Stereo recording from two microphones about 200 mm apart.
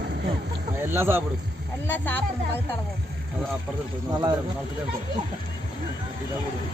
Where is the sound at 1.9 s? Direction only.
10° left (ahead or behind).